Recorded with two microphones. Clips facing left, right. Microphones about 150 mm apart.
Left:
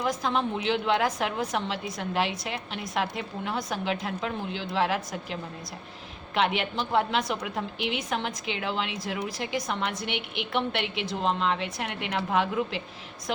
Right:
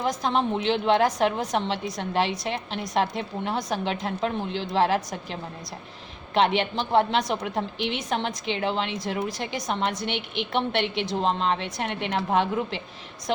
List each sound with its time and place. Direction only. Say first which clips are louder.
0.0 s a woman's voice: right 2 dB; 25° right (ahead or behind)
9.8 s a woman's voice: right 3 dB; 35° right (ahead or behind)